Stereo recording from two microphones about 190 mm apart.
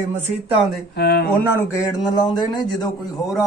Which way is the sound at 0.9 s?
55° left (ahead or behind).